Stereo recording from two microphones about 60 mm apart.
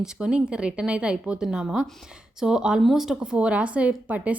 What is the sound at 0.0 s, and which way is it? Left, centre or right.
A woman's voice, centre.